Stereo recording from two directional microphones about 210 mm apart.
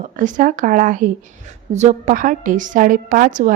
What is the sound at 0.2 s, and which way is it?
A woman's voice, 40° right (ahead or behind).